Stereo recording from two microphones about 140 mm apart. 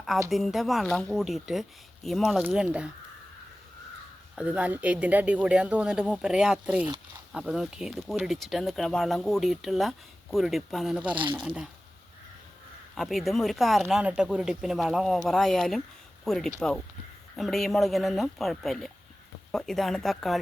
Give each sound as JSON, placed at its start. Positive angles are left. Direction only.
{"t": 0.3, "sound": "speech", "side_deg": 0}
{"t": 2.4, "sound": "speech", "side_deg": -10}
{"t": 4.4, "sound": "speech", "side_deg": -10}
{"t": 11.1, "sound": "speech", "side_deg": -35}
{"t": 11.4, "sound": "speech", "side_deg": -5}
{"t": 13.0, "sound": "speech", "side_deg": 0}